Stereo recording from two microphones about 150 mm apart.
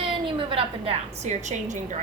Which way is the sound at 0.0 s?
35° right (ahead or behind).